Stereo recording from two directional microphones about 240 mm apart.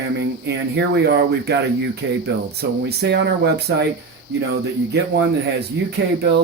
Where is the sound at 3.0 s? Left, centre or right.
Right.